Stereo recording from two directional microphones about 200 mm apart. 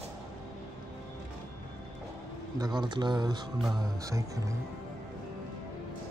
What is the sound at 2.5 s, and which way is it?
Speech, 20° right (ahead or behind).